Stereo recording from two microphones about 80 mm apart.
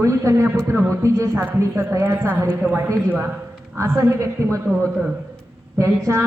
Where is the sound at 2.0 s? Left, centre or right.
Right.